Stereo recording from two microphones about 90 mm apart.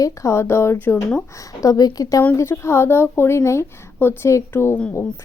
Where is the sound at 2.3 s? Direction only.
30° left (ahead or behind).